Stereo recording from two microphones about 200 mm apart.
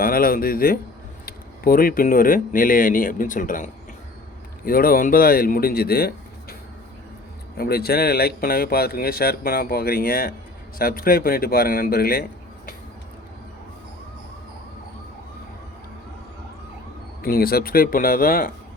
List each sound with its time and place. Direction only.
0.0 s speech: 45° left (ahead or behind)
17.2 s speech: 50° left (ahead or behind)